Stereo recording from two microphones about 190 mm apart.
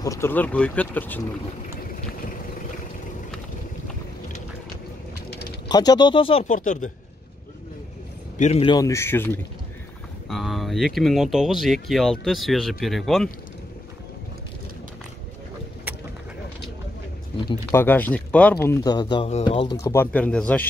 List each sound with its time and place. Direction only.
0.0 s speech: 15° left (ahead or behind)
5.7 s speech: 20° left (ahead or behind)
6.5 s speech: 40° left (ahead or behind)
8.4 s speech: 35° left (ahead or behind)
8.7 s speech: 15° left (ahead or behind)
10.3 s speech: centre (ahead or behind)
17.6 s speech: 10° left (ahead or behind)